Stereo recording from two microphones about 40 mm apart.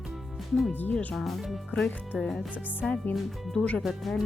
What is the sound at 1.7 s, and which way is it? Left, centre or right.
Speech, left.